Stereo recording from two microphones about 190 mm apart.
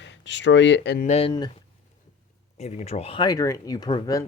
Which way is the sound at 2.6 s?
35° left (ahead or behind).